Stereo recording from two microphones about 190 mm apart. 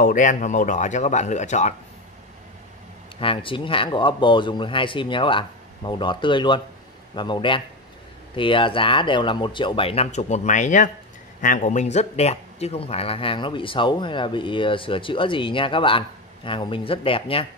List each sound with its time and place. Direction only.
0.0 s a man's voice: 45° left (ahead or behind)
3.2 s speech: 30° left (ahead or behind)